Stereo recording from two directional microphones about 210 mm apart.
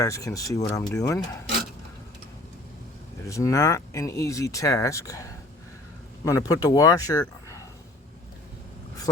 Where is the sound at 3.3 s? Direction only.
15° left (ahead or behind).